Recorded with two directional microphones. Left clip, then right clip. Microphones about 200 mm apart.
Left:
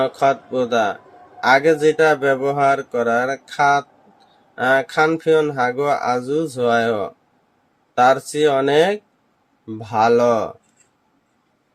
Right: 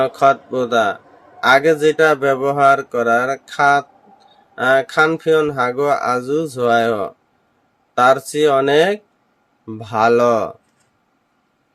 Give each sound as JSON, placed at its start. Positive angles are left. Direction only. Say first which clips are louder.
{"t": 0.0, "sound": "speech", "louder": "right 3 dB", "side_deg": -15}